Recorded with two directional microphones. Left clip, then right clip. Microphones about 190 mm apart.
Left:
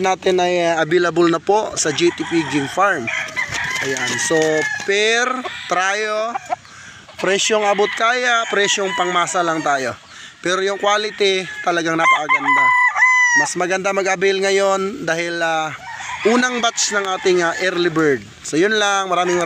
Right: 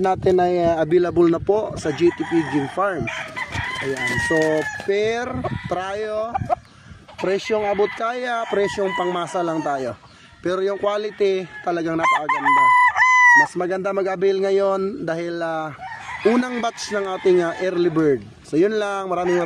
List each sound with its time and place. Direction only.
0.0 s speech: 25° right (ahead or behind); by 2.6 s 5° right (ahead or behind)
4.3 s speech: 10° left (ahead or behind)
4.8 s speech: 15° right (ahead or behind)
7.2 s a man's voice: centre (ahead or behind)
8.0 s a man's voice: 15° right (ahead or behind)
12.4 s chicken: 20° right (ahead or behind)
13.6 s a man's voice: 5° right (ahead or behind)